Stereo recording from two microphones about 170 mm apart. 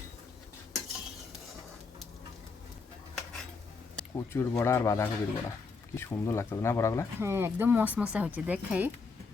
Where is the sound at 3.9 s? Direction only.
15° left (ahead or behind).